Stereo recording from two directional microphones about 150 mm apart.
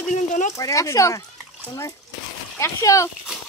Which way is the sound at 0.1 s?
55° left (ahead or behind).